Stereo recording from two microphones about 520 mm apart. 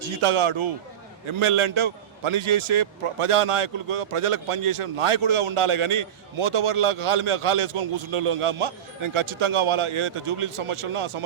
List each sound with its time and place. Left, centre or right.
0.2 s a man's voice: right